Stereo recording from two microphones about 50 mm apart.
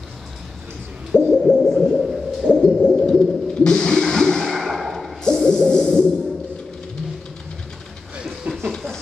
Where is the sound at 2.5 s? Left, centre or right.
Centre.